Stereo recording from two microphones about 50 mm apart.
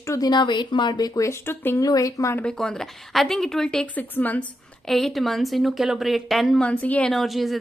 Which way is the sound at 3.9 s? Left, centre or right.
Left.